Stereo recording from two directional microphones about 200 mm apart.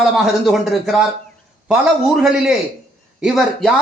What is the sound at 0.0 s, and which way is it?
A man's voice, centre (ahead or behind).